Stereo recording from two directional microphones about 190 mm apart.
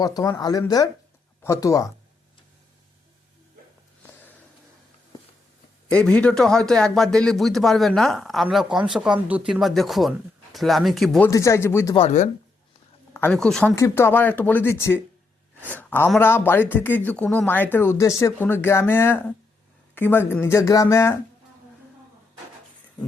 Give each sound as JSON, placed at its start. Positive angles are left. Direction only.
{"t": 0.0, "sound": "a man's voice", "side_deg": 20}
{"t": 5.9, "sound": "a man's voice", "side_deg": 5}
{"t": 11.3, "sound": "a man's voice", "side_deg": 15}
{"t": 11.9, "sound": "speech", "side_deg": 35}
{"t": 13.1, "sound": "a man's voice", "side_deg": 10}